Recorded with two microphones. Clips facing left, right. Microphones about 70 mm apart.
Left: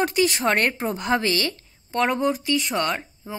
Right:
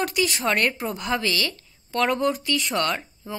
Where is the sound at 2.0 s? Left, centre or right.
Centre.